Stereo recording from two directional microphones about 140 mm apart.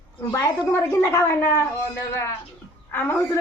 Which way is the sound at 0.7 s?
20° left (ahead or behind).